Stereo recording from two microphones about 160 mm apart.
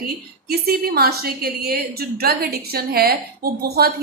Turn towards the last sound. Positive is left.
turn(degrees=-75)  # may be behind; listen again after turning